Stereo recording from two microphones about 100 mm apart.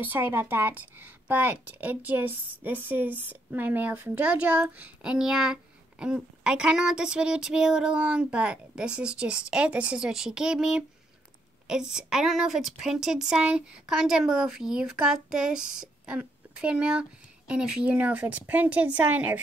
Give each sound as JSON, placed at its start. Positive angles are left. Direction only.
{"t": 0.1, "sound": "a woman's voice", "side_deg": -20}